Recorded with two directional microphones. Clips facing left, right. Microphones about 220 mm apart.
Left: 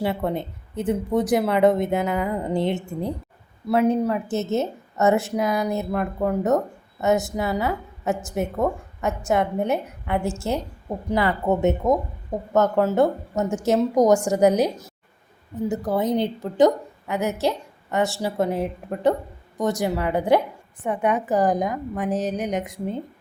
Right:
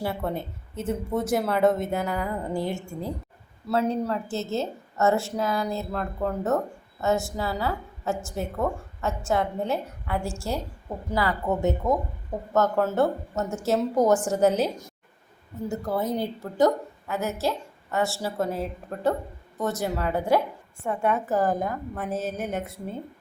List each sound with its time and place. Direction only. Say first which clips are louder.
0.0 s a woman's voice: left 4 dB; 15° left (ahead or behind)
15.7 s a woman's voice: left 4 dB; 20° left (ahead or behind)